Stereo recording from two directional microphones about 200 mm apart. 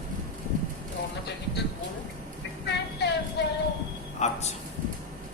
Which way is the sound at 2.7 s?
55° left (ahead or behind).